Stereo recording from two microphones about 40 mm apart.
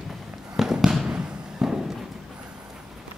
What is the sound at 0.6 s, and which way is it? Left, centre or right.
Fireworks, centre.